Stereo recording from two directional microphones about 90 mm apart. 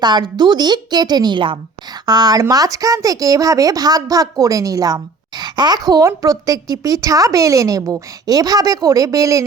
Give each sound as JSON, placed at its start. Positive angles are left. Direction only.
{"t": 0.0, "sound": "a woman's voice", "side_deg": -50}